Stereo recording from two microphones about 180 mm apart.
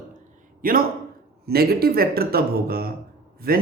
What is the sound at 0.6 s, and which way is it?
A man's voice, 55° right (ahead or behind).